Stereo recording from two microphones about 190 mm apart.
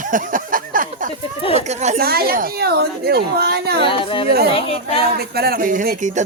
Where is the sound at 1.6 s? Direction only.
35° right (ahead or behind).